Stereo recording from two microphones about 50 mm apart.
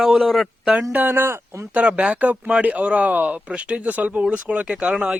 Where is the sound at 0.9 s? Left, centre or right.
Right.